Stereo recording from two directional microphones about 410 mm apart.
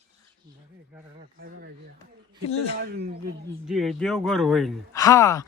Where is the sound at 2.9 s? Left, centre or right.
Right.